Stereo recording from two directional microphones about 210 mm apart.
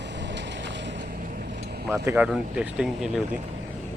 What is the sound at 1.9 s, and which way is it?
Speech, 10° right (ahead or behind).